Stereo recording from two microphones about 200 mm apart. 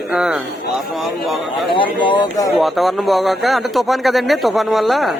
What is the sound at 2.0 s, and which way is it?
Speech, 20° left (ahead or behind).